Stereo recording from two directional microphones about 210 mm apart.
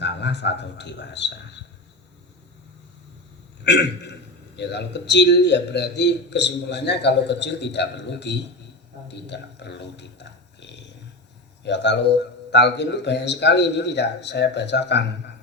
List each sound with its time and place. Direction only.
0.0 s a man's voice: 55° left (ahead or behind)
3.6 s a man's voice: 55° left (ahead or behind)